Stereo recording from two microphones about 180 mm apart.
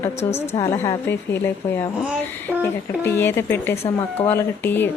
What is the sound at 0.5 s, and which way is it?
Speech, 20° left (ahead or behind).